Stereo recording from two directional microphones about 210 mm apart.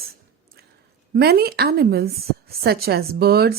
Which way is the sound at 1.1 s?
45° right (ahead or behind).